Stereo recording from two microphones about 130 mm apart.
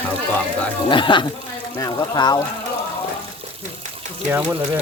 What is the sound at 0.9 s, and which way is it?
Speech, 40° left (ahead or behind).